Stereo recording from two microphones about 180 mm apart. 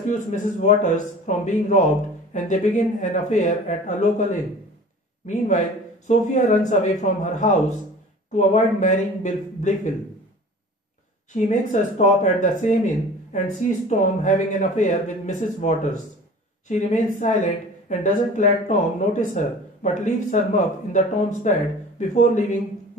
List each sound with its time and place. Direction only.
0.1 s speech: 40° left (ahead or behind)
5.2 s speech: 45° left (ahead or behind)
11.3 s speech: 40° left (ahead or behind)